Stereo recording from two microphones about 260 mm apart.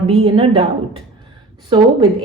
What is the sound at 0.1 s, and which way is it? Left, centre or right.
Speech, right.